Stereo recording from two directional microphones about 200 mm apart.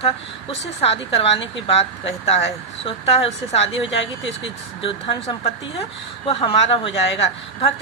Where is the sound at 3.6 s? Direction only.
65° left (ahead or behind).